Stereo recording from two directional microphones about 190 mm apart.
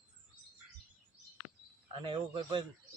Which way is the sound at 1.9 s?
25° right (ahead or behind).